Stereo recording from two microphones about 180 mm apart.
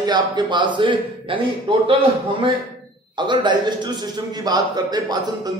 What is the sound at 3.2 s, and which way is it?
Speech, 25° right (ahead or behind).